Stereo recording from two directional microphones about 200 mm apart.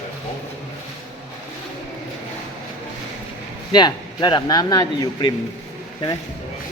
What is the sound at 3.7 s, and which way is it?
Speech, 20° left (ahead or behind).